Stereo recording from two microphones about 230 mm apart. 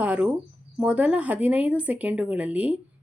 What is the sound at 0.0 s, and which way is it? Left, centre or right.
Speech, centre.